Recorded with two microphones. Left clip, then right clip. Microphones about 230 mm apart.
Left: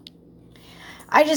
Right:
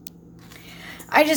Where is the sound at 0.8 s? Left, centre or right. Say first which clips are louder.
Left 1 dB; centre.